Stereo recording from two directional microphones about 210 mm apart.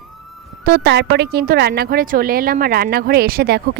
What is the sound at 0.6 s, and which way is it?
A woman's voice, 50° right (ahead or behind).